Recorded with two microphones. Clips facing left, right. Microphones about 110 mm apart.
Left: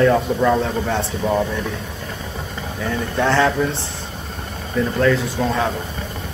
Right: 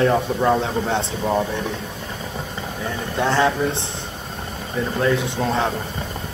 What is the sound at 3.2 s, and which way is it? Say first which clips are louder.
Speech: left 1 dB; 15° right (ahead or behind).